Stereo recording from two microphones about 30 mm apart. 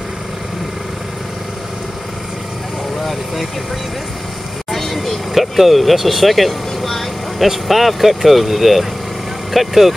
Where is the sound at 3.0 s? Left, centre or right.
Centre.